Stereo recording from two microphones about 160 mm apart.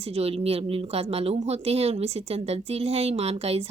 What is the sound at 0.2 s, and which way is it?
A woman's voice, 40° right (ahead or behind).